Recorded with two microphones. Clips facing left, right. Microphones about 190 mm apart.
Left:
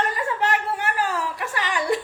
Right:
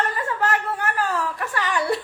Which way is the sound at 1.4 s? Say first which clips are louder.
Right 1 dB; 40° right (ahead or behind).